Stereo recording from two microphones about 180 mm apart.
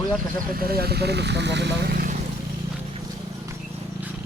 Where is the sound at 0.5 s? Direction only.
55° right (ahead or behind).